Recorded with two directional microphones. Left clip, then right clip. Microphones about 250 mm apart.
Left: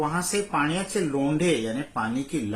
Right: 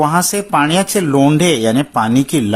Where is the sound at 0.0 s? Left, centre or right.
Right.